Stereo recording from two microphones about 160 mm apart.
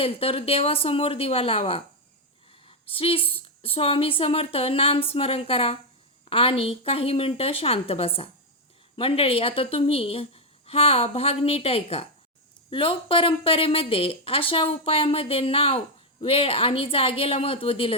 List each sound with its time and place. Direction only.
0.0 s a woman's voice: 35° left (ahead or behind)
2.6 s a sound: 35° left (ahead or behind)
3.3 s a woman's voice: 35° left (ahead or behind)